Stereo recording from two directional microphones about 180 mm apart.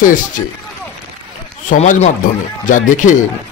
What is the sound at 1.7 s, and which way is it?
Speech, 40° left (ahead or behind).